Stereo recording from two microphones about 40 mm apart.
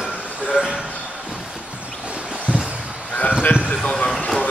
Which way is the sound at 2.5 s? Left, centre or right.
Right.